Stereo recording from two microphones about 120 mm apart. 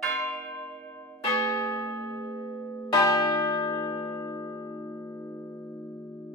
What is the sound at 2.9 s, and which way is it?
Church bell, 25° left (ahead or behind).